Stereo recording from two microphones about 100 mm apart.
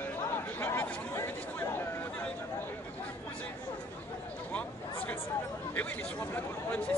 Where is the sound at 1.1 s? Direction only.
25° left (ahead or behind).